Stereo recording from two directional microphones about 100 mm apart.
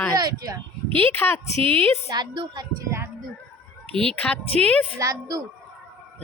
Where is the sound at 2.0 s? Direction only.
45° right (ahead or behind).